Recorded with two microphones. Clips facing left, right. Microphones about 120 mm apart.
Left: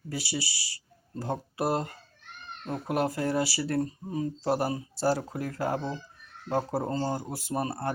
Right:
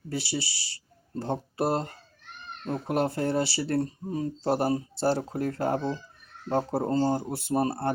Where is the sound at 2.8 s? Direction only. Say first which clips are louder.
Right 1 dB; 30° right (ahead or behind).